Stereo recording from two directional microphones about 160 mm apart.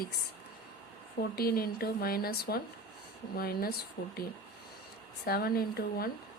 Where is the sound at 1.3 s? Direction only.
70° left (ahead or behind).